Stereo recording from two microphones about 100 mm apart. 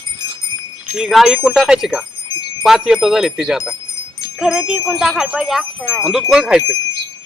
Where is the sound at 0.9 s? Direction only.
5° right (ahead or behind).